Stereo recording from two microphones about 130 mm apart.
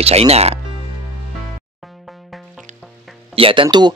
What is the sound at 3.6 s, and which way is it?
Speech, 35° right (ahead or behind).